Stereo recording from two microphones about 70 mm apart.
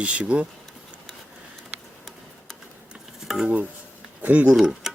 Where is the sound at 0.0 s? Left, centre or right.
Centre.